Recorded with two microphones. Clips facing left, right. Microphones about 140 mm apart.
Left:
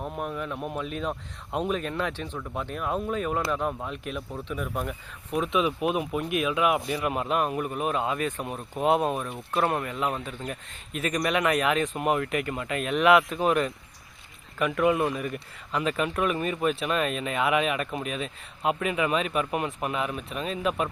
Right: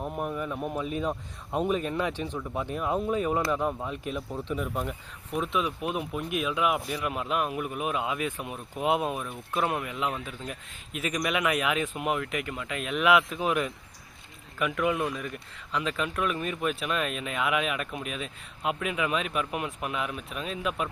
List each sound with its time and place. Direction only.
0.2 s speech: 15° right (ahead or behind)
0.5 s speech: 5° left (ahead or behind)
0.8 s speech: 15° right (ahead or behind)
5.4 s speech: 15° left (ahead or behind); by 7.1 s centre (ahead or behind)
7.1 s speech: 45° left (ahead or behind)
7.5 s speech: 5° right (ahead or behind)
11.9 s speech: 45° left (ahead or behind)
12.7 s speech: centre (ahead or behind)